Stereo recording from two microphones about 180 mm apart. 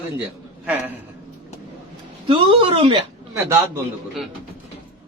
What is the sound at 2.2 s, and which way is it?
Speech, 30° right (ahead or behind).